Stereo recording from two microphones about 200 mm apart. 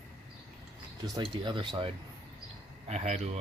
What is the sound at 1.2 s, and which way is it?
Speech, 25° right (ahead or behind).